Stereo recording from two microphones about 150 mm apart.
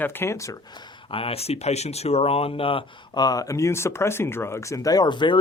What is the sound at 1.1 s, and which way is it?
Speech, 40° left (ahead or behind).